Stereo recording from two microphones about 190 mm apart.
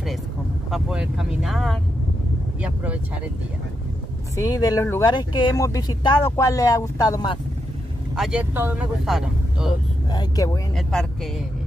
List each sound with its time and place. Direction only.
0.7 s speech: centre (ahead or behind)
4.4 s speech: 20° left (ahead or behind)
8.2 s speech: 5° right (ahead or behind)
10.1 s speech: 20° left (ahead or behind)
10.8 s speech: centre (ahead or behind)